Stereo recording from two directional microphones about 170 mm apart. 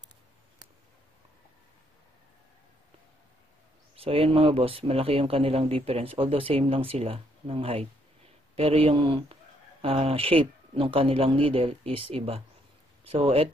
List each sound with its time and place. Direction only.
3.9 s speech: 35° right (ahead or behind)